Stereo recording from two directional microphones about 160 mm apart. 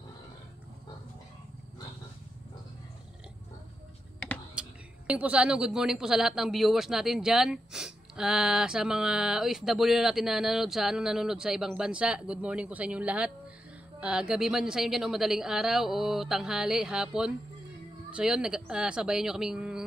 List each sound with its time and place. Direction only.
4.6 s a woman's voice: 10° right (ahead or behind)